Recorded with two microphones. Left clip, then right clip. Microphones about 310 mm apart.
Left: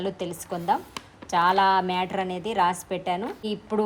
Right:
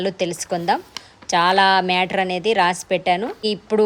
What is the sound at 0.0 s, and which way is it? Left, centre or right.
A woman's voice, centre.